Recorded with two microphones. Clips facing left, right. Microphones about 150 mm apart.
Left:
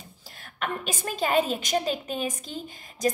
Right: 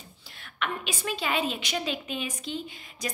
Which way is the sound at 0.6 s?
45° left (ahead or behind).